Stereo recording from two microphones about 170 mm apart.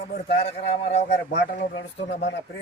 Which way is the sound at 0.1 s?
70° left (ahead or behind).